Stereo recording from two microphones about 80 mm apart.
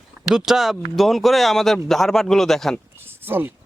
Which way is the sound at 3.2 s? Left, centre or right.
Right.